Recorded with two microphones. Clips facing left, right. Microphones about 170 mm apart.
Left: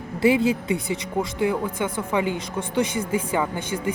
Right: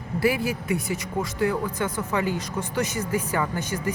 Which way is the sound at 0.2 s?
20° left (ahead or behind).